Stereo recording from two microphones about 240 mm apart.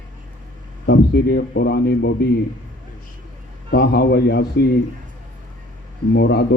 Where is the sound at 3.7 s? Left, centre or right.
Left.